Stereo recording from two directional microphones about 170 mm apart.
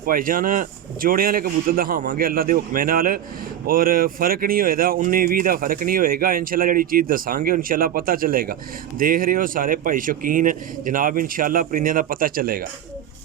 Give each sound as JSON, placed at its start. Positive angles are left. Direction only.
{"t": 0.0, "sound": "speech", "side_deg": -55}